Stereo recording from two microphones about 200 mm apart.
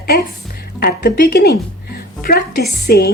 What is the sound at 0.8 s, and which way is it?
Speech, 50° left (ahead or behind).